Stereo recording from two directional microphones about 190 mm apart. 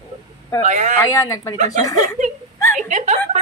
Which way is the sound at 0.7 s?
40° right (ahead or behind).